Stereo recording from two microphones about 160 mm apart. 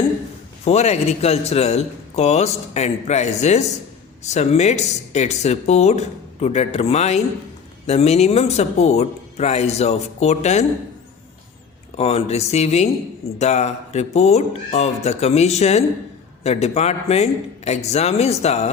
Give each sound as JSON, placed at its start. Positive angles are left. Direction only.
{"t": 0.6, "sound": "a man's voice", "side_deg": 40}
{"t": 11.9, "sound": "speech", "side_deg": 40}